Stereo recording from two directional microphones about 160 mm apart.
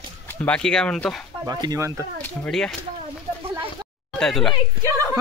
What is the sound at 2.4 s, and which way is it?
Speech, 5° left (ahead or behind).